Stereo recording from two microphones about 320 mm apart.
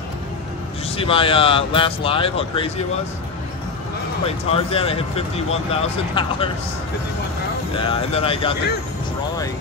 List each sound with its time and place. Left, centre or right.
0.9 s speech: centre
4.3 s speech: centre
7.7 s speech: centre